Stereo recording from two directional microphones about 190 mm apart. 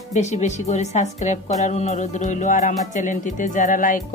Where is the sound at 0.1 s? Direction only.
35° left (ahead or behind).